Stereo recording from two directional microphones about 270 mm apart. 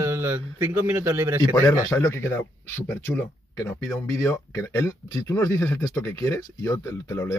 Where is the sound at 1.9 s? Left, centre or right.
Centre.